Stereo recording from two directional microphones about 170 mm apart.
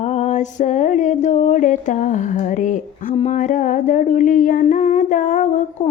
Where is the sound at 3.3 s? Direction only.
50° left (ahead or behind).